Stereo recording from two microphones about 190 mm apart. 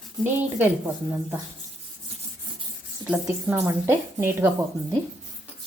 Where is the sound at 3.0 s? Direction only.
5° right (ahead or behind).